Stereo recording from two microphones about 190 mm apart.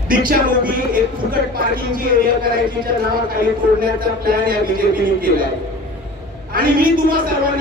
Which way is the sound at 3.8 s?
50° right (ahead or behind).